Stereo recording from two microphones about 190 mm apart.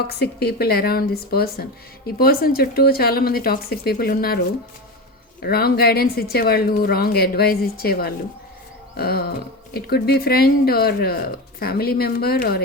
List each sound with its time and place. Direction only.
0.1 s speech: 55° left (ahead or behind)
5.4 s speech: 55° left (ahead or behind)